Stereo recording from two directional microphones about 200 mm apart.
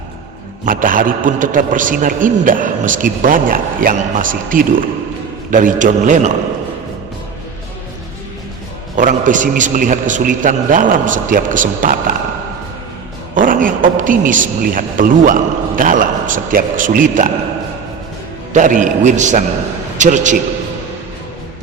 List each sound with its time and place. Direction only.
0.6 s a man's voice: 40° right (ahead or behind)
9.0 s a man's voice: 40° right (ahead or behind)
13.3 s a man's voice: 40° right (ahead or behind)
18.5 s a man's voice: 40° right (ahead or behind)